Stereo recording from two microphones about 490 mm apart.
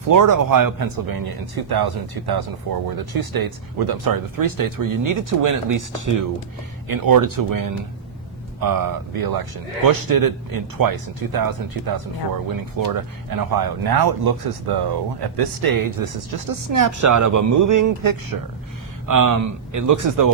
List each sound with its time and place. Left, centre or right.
0.1 s a man's voice: right